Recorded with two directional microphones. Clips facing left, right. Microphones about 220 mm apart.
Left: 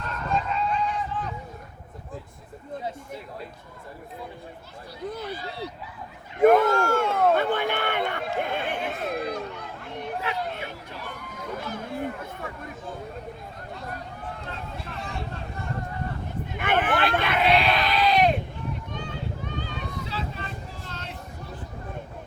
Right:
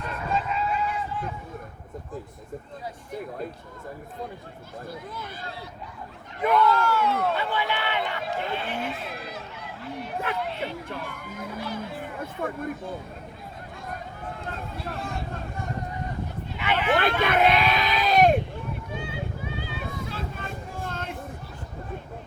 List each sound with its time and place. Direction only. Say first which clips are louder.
0.0 s fowl: even; 5° right (ahead or behind)
5.1 s speech: left 4 dB; 50° right (ahead or behind)
6.4 s a sound: left 4 dB; 50° left (ahead or behind)
9.2 s chatter: left 7 dB; 5° right (ahead or behind)
10.3 s speech: right 1 dB; 50° right (ahead or behind)
10.8 s run: right 3 dB; 50° right (ahead or behind)
11.5 s music: left 2 dB; 50° left (ahead or behind)
12.2 s speech: right 6 dB; 50° right (ahead or behind)
14.8 s speech: right 3 dB; 50° right (ahead or behind)
16.6 s speech: even; 50° left (ahead or behind)
17.2 s a sound: right 1 dB; 50° right (ahead or behind)
17.9 s sheep: right 2 dB; 45° right (ahead or behind)
18.9 s a sound: right 1 dB; 5° right (ahead or behind)
20.1 s vehicle: even; 50° right (ahead or behind)